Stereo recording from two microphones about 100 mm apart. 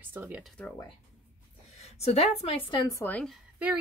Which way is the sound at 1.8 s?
90° left.